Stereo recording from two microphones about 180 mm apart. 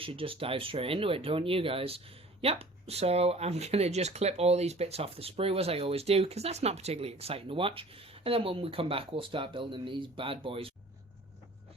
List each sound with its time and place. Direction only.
0.0 s speech: 30° right (ahead or behind)